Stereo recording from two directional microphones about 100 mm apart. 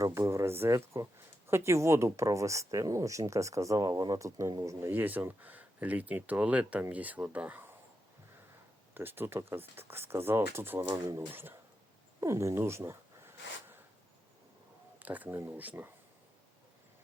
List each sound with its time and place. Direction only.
0.0 s speech: 30° right (ahead or behind)
4.9 s speech: 20° right (ahead or behind)
9.0 s speech: 20° right (ahead or behind)
10.8 s speech: 40° right (ahead or behind)
11.3 s speech: 20° right (ahead or behind)
14.9 s speech: 15° right (ahead or behind)